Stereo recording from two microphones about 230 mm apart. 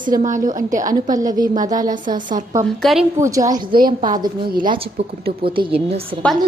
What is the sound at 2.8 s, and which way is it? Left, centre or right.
Speech, centre.